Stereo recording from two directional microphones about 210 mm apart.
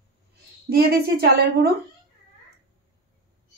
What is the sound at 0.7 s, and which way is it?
Speech, 45° right (ahead or behind).